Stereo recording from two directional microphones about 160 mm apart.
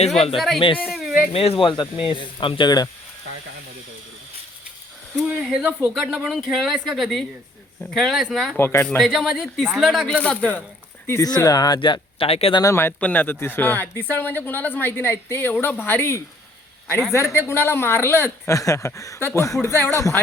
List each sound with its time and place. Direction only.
0.3 s speech: centre (ahead or behind)
0.9 s a sound: 5° right (ahead or behind)
1.3 s speech: 35° left (ahead or behind)
5.1 s speech: 5° right (ahead or behind)
8.5 s speech: 15° left (ahead or behind)
9.0 s speech: centre (ahead or behind)
11.0 s speech: 20° left (ahead or behind); by 12.6 s 35° left (ahead or behind)
12.6 s speech: 15° left (ahead or behind)